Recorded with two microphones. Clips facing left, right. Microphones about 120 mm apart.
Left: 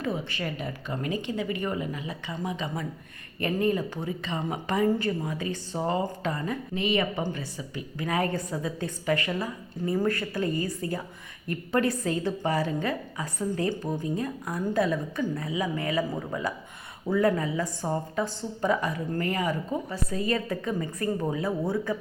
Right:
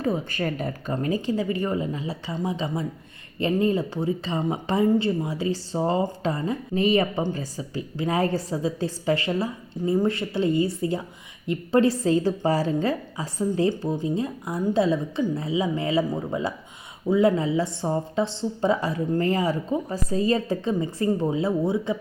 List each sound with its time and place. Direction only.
0.0 s a woman's voice: 40° right (ahead or behind); by 21.9 s 25° right (ahead or behind)